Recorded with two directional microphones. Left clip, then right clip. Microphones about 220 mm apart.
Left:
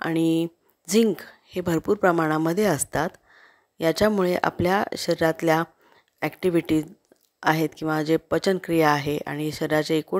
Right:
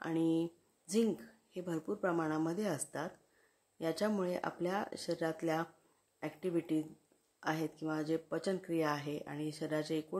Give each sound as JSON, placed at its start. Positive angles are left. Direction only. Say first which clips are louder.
{"t": 0.0, "sound": "speech", "louder": "left 11 dB", "side_deg": 40}